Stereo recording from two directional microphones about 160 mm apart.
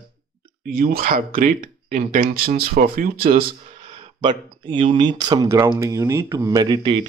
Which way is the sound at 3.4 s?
40° right (ahead or behind).